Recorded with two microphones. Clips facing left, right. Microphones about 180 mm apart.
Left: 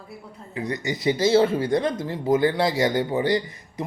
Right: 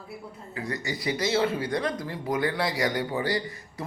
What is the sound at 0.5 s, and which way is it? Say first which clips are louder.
Speech: left 5 dB; 20° left (ahead or behind).